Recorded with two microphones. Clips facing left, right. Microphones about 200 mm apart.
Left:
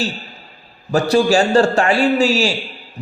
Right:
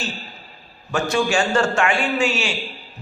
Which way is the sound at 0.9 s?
35° left (ahead or behind).